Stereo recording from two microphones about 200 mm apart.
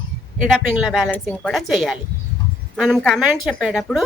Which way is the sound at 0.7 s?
Centre (ahead or behind).